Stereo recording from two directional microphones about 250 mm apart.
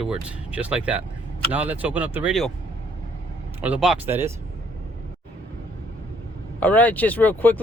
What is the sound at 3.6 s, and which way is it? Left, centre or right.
Speech, centre.